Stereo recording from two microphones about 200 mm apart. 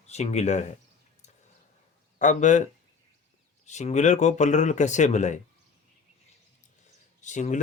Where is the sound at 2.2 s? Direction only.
35° left (ahead or behind).